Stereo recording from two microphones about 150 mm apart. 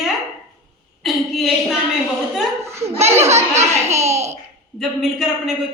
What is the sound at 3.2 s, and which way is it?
Speech, 50° right (ahead or behind).